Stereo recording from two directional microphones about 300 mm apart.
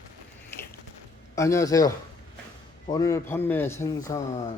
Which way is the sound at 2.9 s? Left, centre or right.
Centre.